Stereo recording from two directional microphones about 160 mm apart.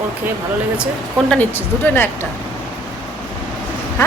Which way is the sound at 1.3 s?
10° left (ahead or behind).